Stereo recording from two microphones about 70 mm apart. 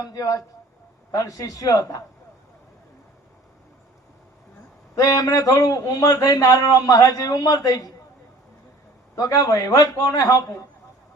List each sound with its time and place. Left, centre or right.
0.0 s a man's voice: left
4.9 s a man's voice: left
6.2 s a man's voice: left
9.1 s a man's voice: left